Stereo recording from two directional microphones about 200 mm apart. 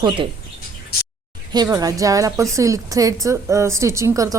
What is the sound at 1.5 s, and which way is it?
A woman's voice, 20° right (ahead or behind).